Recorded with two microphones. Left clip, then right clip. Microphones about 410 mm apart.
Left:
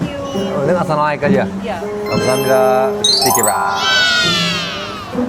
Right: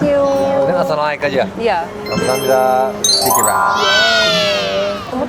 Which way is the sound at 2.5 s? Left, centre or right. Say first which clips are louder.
Even; left.